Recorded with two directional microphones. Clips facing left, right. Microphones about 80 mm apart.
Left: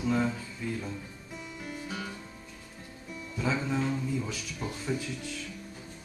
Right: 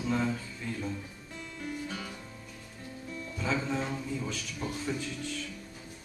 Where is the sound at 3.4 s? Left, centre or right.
Centre.